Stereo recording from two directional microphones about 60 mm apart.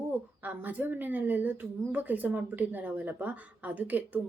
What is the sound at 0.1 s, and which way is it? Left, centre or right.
Speech, right.